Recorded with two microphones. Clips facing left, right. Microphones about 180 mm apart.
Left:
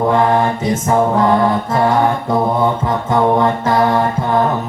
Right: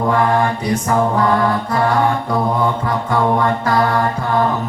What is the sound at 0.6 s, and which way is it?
Mantra, 20° left (ahead or behind).